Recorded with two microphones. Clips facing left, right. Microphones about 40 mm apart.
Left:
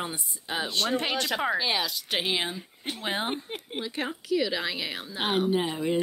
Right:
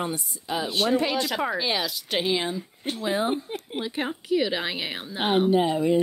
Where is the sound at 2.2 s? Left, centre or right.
Left.